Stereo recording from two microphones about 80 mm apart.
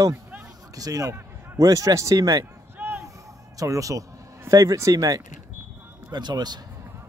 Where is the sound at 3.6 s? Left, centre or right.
Right.